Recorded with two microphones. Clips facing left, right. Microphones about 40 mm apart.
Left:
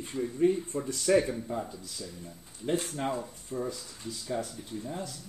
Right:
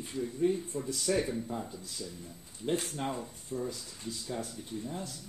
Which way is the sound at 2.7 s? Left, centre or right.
Left.